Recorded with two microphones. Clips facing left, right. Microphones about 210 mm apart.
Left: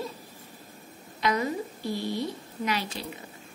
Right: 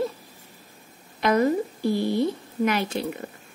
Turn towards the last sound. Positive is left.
turn(degrees=-55)  # may be behind; listen again after turning